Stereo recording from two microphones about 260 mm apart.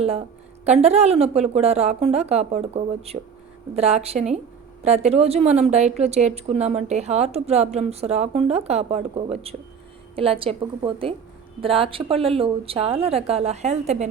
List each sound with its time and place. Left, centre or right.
0.6 s speech: right